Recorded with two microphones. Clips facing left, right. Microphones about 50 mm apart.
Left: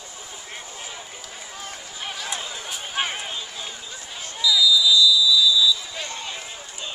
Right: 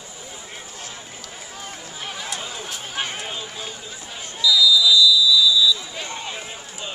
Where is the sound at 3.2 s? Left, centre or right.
Centre.